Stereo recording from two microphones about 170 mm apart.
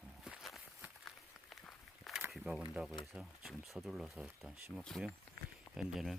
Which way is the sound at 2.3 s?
Centre (ahead or behind).